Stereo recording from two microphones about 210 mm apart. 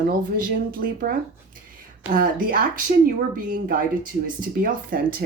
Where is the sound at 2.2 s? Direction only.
40° right (ahead or behind).